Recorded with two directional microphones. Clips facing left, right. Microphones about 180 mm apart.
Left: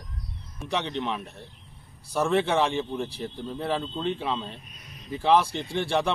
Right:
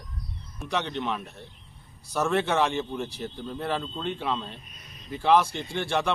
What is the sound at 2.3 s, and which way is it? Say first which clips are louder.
Speech: left 1 dB; centre (ahead or behind).